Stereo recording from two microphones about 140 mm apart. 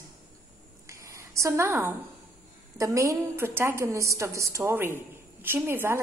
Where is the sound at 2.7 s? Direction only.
20° right (ahead or behind).